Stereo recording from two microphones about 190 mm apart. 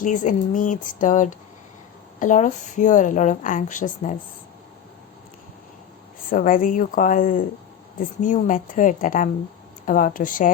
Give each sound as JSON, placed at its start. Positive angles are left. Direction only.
{"t": 0.0, "sound": "speech", "side_deg": 40}
{"t": 6.3, "sound": "speech", "side_deg": 45}